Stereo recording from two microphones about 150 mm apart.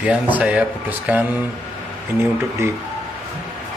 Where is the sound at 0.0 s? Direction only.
10° right (ahead or behind).